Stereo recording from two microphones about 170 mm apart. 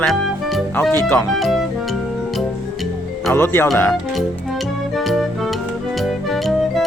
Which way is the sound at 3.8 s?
5° left (ahead or behind).